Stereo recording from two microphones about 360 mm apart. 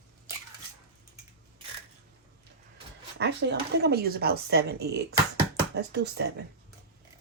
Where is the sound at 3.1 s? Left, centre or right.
Right.